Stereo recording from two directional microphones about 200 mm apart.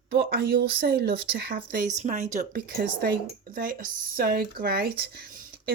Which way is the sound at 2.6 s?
50° right (ahead or behind).